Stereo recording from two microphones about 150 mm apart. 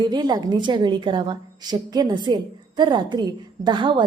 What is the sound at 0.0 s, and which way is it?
A woman's voice, 30° right (ahead or behind).